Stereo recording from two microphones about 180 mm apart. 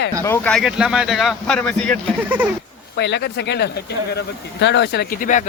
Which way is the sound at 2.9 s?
75° left (ahead or behind).